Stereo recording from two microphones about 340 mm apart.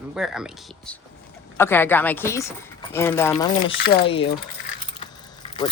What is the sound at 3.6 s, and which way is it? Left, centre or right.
Speech, centre.